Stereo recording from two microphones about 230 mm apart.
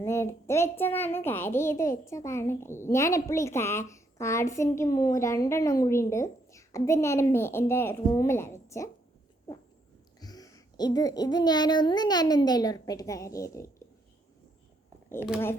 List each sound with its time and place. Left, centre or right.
0.0 s a child's voice: centre
10.2 s a child's voice: centre